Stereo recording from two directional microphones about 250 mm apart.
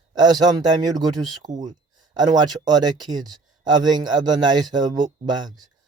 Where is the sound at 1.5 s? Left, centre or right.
Right.